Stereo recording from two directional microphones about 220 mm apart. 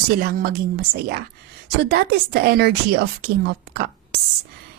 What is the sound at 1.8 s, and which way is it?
Speech, 50° right (ahead or behind).